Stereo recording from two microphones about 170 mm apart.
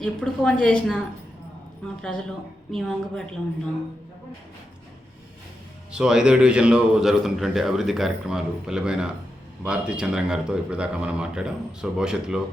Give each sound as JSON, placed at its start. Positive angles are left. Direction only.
{"t": 0.0, "sound": "a man's voice", "side_deg": 5}
{"t": 5.9, "sound": "a man's voice", "side_deg": -5}